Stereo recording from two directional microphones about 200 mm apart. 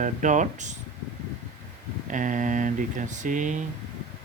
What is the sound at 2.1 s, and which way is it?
Speech, 40° right (ahead or behind).